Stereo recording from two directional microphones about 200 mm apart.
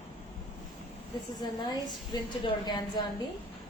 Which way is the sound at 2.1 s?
20° left (ahead or behind).